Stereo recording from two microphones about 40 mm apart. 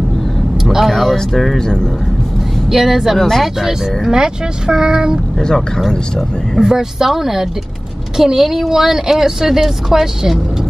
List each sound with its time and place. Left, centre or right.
0.6 s vehicle: centre
1.1 s speech: centre
2.7 s speech: centre
3.2 s speech: centre
3.6 s speech: centre
5.9 s speech: centre
6.6 s speech: centre